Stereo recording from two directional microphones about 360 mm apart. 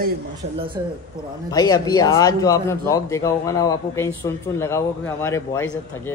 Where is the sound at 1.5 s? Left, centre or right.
Centre.